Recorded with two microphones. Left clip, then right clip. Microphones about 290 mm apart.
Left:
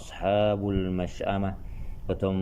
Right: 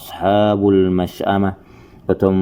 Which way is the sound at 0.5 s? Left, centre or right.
Right.